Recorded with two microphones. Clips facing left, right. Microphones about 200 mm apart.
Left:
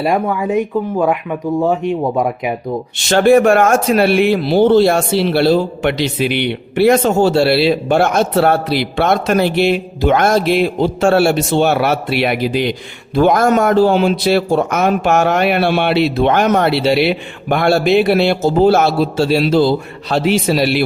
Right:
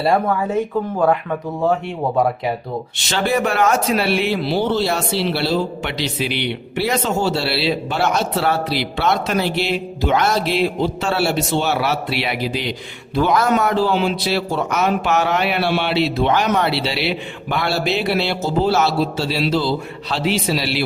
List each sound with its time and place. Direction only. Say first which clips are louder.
0.0 s speech: left 2 dB; 15° left (ahead or behind)
3.1 s speech: left 10 dB; 50° left (ahead or behind)